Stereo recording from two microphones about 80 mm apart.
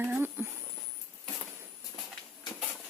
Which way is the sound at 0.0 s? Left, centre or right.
Right.